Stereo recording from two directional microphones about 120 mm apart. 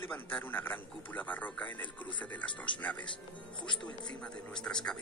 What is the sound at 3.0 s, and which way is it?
Speech, 40° left (ahead or behind).